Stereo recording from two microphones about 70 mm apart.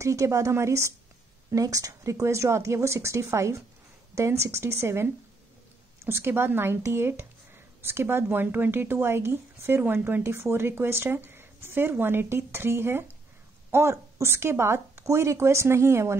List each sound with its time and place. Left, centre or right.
0.0 s speech: right
1.5 s a woman's voice: right